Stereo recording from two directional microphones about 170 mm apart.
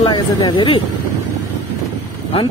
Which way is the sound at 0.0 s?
25° left (ahead or behind).